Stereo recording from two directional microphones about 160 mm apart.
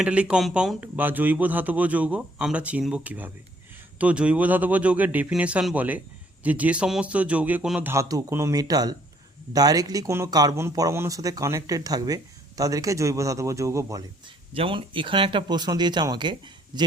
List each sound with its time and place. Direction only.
0.0 s speech: 5° right (ahead or behind)
14.5 s speech: 35° right (ahead or behind)